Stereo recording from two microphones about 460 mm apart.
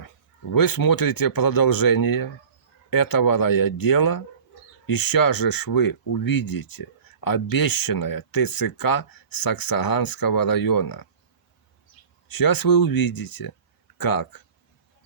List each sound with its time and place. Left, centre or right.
0.5 s speech: left
12.3 s speech: left